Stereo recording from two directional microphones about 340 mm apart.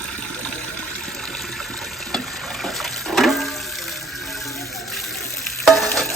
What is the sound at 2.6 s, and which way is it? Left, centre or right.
Water, centre.